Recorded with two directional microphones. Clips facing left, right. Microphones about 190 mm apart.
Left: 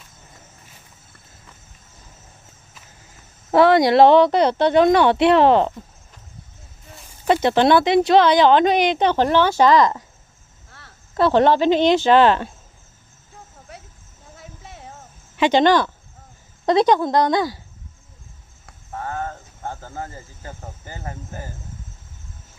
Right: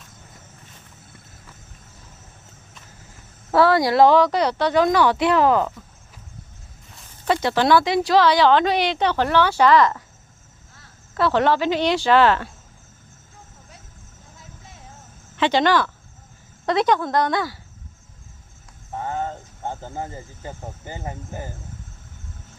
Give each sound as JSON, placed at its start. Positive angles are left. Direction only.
{"t": 3.5, "sound": "a woman's voice", "side_deg": 20}
{"t": 7.4, "sound": "a woman's voice", "side_deg": 20}
{"t": 9.7, "sound": "speech", "side_deg": 35}
{"t": 11.1, "sound": "a woman's voice", "side_deg": 25}
{"t": 14.3, "sound": "a sound", "side_deg": 65}
{"t": 15.3, "sound": "a woman's voice", "side_deg": 15}
{"t": 18.9, "sound": "speech", "side_deg": -20}